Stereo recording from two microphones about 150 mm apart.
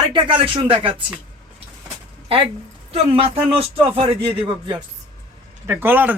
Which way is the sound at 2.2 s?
40° right (ahead or behind).